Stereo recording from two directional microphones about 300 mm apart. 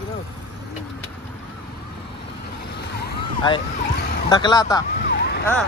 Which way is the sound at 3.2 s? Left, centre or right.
Centre.